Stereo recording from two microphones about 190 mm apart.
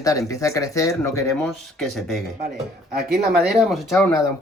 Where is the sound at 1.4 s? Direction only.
Centre (ahead or behind).